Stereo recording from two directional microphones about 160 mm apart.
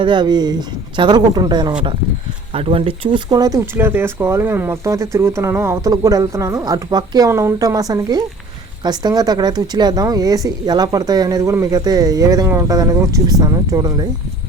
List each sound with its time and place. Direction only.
0.0 s speech: 30° right (ahead or behind)